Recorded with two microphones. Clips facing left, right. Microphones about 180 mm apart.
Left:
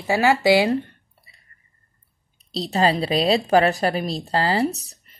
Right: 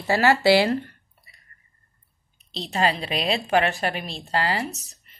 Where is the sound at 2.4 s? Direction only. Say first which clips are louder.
Left 4 dB; 35° left (ahead or behind).